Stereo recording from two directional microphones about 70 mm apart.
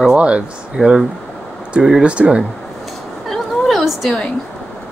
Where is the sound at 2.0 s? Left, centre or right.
Centre.